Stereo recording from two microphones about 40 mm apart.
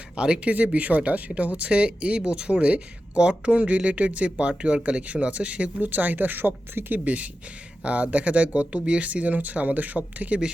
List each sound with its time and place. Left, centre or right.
0.2 s speech: right
0.5 s speech: right
5.8 s speech: right
7.0 s speech: right